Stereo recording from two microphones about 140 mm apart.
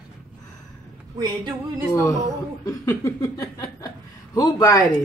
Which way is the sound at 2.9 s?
25° left (ahead or behind).